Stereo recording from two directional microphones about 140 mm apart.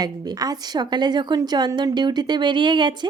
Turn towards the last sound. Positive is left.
turn(degrees=-30)  # may be behind; listen again after turning